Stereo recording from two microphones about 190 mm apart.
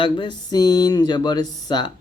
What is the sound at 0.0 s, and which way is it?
Speech, 25° left (ahead or behind).